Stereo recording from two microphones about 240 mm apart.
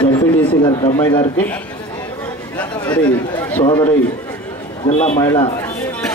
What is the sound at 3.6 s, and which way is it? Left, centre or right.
Speech, centre.